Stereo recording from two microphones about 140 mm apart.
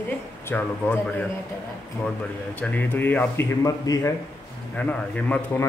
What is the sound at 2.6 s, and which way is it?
Speech, 10° left (ahead or behind).